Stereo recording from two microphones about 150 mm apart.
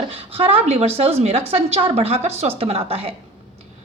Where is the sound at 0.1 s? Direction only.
40° right (ahead or behind).